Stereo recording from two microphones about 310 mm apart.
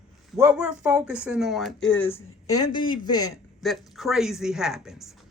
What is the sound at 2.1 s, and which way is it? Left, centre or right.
Speech, centre.